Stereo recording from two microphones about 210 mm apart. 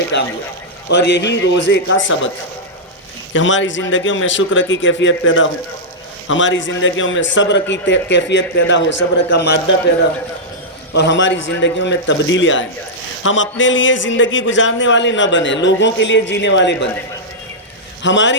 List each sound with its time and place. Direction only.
0.1 s speech: 55° left (ahead or behind)
3.3 s speech: 65° left (ahead or behind)
10.9 s speech: 55° left (ahead or behind)
18.0 s speech: 60° left (ahead or behind)